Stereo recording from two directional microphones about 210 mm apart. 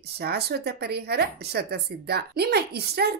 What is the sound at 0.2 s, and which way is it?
Speech, 50° right (ahead or behind).